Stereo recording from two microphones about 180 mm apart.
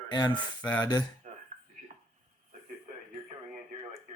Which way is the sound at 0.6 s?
10° left (ahead or behind).